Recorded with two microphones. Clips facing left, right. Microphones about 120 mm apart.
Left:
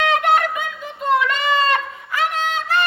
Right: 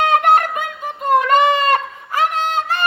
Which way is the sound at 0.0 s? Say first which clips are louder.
Right 3 dB; 50° right (ahead or behind).